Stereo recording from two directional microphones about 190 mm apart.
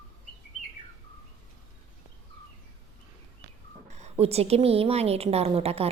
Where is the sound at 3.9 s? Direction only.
35° right (ahead or behind).